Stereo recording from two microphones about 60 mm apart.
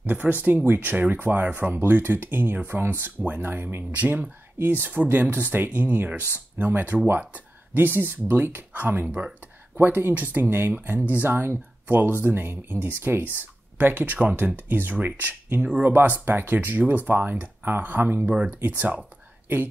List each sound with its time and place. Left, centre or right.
0.0 s speech: right
4.6 s speech: right
9.8 s speech: right
15.6 s speech: right
15.9 s speech: right